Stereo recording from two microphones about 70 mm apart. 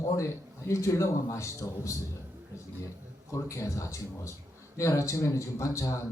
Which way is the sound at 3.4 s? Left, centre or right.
Left.